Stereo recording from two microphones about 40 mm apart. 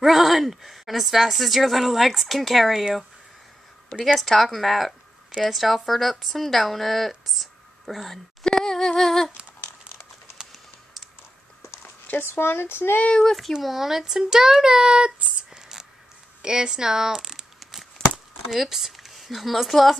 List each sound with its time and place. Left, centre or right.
0.0 s speech: centre
4.0 s speech: centre
8.5 s a sound: centre
12.3 s speech: left
13.2 s speech: centre
13.6 s speech: centre